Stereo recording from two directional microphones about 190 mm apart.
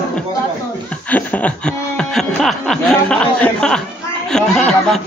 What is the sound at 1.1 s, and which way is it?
Snicker, 5° left (ahead or behind).